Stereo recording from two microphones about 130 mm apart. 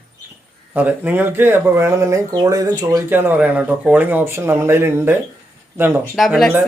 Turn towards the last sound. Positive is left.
turn(degrees=0)  # may be behind; listen again after turning